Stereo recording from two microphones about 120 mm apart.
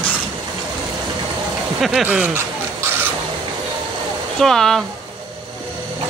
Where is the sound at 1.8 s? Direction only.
10° right (ahead or behind).